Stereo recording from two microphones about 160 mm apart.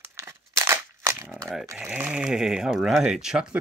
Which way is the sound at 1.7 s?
10° right (ahead or behind).